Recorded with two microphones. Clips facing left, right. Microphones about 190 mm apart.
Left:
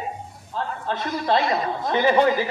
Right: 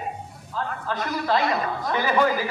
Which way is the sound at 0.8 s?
30° left (ahead or behind).